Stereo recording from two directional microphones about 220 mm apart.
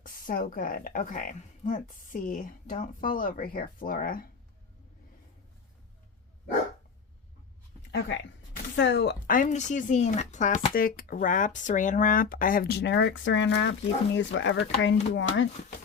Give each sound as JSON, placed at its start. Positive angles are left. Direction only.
{"t": 0.0, "sound": "speech", "side_deg": 40}
{"t": 7.8, "sound": "speech", "side_deg": 55}